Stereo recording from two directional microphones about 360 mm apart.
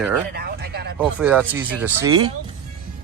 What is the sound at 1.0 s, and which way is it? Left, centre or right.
Speech, centre.